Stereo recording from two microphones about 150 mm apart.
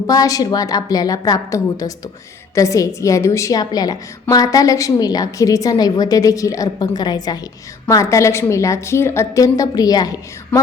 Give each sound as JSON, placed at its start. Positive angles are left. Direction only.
{"t": 0.1, "sound": "a woman's voice", "side_deg": 25}